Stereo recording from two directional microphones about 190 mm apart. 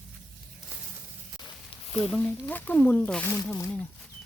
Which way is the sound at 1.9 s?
35° left (ahead or behind).